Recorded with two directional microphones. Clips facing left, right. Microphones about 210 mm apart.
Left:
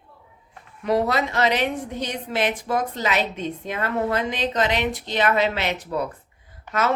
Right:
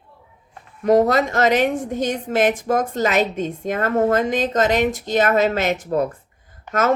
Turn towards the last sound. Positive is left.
turn(degrees=-45)  # may be behind; listen again after turning